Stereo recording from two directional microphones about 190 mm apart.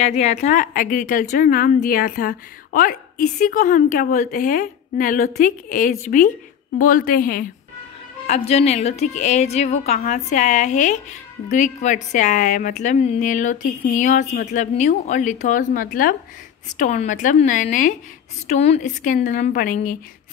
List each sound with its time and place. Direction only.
0.0 s a woman's voice: 35° left (ahead or behind)
8.3 s a woman's voice: 35° left (ahead or behind)